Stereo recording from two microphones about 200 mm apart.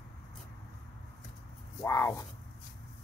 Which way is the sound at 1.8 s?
15° left (ahead or behind).